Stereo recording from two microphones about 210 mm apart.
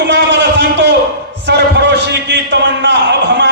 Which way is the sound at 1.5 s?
60° right (ahead or behind).